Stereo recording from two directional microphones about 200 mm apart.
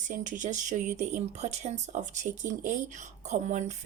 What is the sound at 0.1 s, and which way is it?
A woman's voice, 40° right (ahead or behind).